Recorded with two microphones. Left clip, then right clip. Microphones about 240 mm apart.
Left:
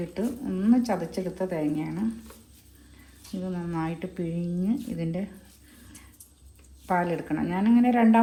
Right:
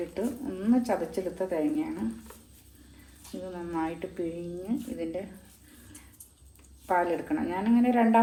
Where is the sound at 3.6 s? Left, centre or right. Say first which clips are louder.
Right 2 dB; left.